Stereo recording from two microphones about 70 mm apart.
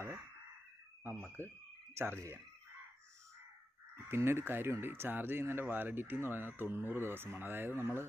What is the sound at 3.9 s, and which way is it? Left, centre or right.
Speech, right.